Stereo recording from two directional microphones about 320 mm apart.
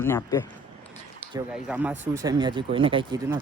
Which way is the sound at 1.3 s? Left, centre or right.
Centre.